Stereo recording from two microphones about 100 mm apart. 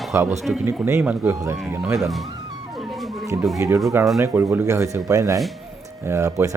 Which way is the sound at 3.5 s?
30° right (ahead or behind).